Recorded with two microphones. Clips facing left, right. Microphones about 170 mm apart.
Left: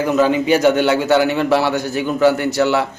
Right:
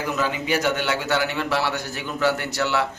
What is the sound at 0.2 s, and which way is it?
A man's voice, 25° left (ahead or behind).